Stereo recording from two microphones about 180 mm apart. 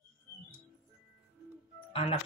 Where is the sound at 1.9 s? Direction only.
30° left (ahead or behind).